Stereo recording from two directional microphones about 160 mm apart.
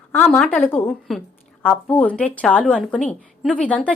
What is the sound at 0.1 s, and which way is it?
A woman's voice, 10° left (ahead or behind).